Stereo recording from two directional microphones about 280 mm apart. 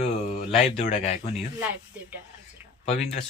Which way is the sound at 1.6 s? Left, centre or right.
Centre.